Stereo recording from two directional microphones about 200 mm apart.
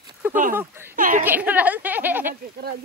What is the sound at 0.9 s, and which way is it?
Speech, 40° right (ahead or behind).